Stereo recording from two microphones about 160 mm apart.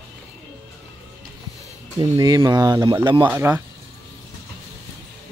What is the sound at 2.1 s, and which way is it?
Speech, 25° right (ahead or behind).